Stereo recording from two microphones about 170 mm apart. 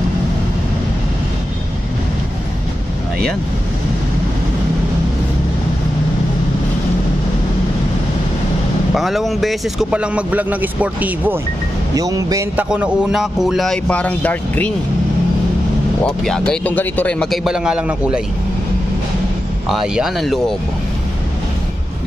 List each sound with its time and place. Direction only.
8.9 s speech: centre (ahead or behind)
11.9 s speech: 20° right (ahead or behind)
12.5 s speech: 5° right (ahead or behind); by 14.7 s 10° left (ahead or behind)
16.0 s speech: 5° left (ahead or behind)
19.7 s speech: centre (ahead or behind)